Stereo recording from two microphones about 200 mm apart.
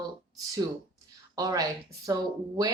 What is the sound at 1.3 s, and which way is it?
Speech, 20° right (ahead or behind).